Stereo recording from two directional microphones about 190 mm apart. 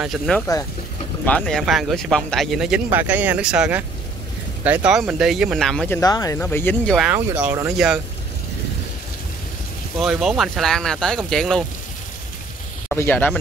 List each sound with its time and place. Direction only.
0.0 s speech: centre (ahead or behind)
5.9 s speech: 20° left (ahead or behind)
7.1 s speech: 10° right (ahead or behind)
9.9 s speech: centre (ahead or behind)
12.8 s speech: 10° left (ahead or behind)